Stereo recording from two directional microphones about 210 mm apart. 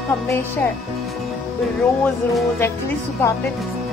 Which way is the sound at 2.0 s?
10° left (ahead or behind).